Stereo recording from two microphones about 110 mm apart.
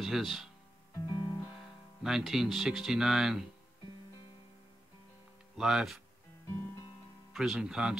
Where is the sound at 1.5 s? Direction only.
Centre (ahead or behind).